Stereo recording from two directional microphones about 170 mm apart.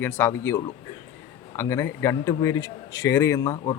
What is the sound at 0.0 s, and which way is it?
A man's voice, 10° left (ahead or behind).